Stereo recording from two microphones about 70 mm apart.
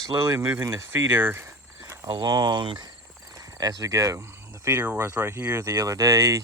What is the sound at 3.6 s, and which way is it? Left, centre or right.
Speech, right.